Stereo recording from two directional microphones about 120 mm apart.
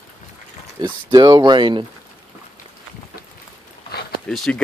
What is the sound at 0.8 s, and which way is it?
Speech, 40° right (ahead or behind).